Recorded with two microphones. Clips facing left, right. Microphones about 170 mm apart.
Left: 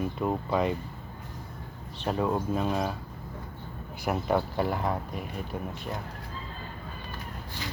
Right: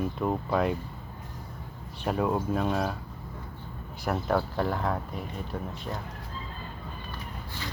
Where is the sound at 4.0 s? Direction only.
5° left (ahead or behind).